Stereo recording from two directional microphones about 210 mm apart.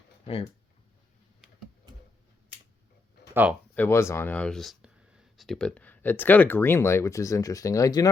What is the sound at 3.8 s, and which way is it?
Speech, 10° left (ahead or behind).